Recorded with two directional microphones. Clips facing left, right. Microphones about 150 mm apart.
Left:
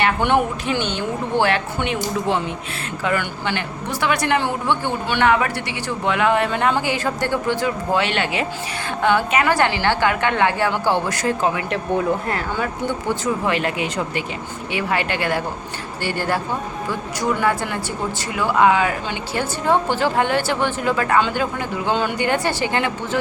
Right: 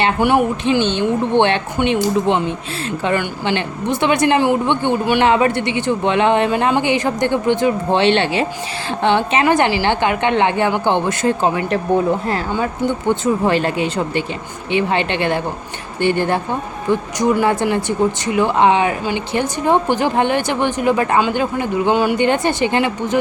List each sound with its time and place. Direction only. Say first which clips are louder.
0.2 s a woman's voice: right 5 dB; 10° right (ahead or behind)
0.9 s speech: right 6 dB; 25° right (ahead or behind)
13.2 s a woman's voice: right 4 dB; 30° right (ahead or behind)